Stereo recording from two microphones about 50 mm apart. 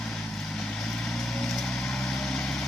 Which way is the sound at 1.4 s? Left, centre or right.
Centre.